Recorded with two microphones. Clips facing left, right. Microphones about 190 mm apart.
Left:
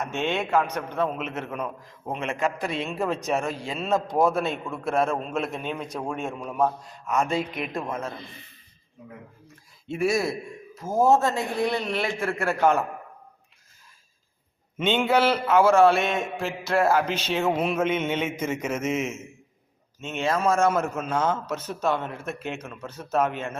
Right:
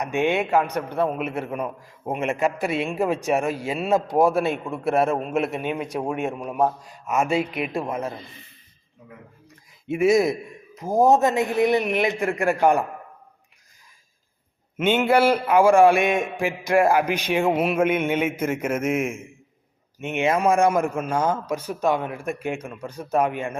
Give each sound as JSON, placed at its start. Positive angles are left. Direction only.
{"t": 0.0, "sound": "a man's voice", "side_deg": -15}
{"t": 7.1, "sound": "a man's voice", "side_deg": 0}
{"t": 9.9, "sound": "a man's voice", "side_deg": -20}
{"t": 14.8, "sound": "a man's voice", "side_deg": -10}